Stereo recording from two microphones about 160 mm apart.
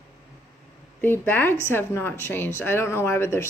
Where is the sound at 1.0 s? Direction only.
10° left (ahead or behind).